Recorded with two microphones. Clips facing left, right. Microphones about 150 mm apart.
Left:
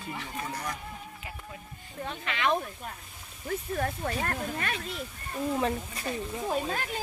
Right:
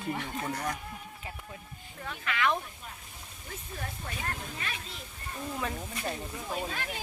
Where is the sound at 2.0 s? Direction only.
25° left (ahead or behind).